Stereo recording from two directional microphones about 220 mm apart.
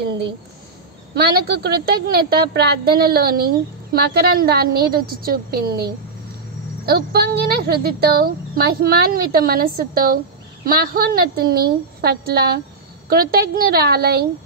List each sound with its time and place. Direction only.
1.1 s a woman's voice: 45° right (ahead or behind)
6.9 s a woman's voice: 45° right (ahead or behind)